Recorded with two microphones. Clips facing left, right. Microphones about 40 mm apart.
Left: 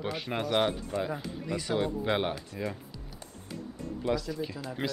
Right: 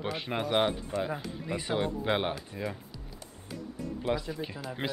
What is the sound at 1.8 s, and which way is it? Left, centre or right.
Speech, centre.